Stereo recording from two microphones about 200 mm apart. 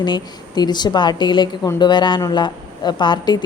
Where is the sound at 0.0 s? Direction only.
20° left (ahead or behind).